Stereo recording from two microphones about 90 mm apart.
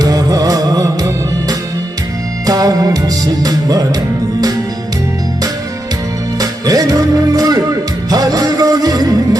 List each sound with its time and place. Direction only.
0.0 s music: 40° right (ahead or behind)
6.4 s music: 40° right (ahead or behind)